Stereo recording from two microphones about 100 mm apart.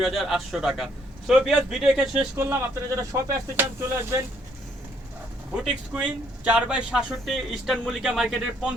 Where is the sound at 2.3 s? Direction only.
25° right (ahead or behind).